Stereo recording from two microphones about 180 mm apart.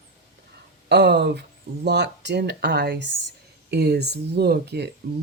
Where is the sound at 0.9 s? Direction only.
70° right (ahead or behind).